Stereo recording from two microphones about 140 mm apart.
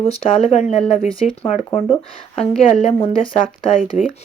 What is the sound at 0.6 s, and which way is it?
Speech, centre (ahead or behind).